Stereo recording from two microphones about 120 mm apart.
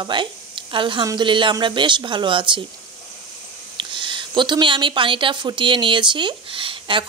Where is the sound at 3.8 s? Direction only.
45° right (ahead or behind).